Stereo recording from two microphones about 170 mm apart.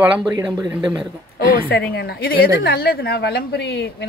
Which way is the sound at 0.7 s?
5° right (ahead or behind).